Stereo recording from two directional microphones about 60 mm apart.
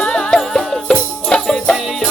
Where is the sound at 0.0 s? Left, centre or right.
Centre.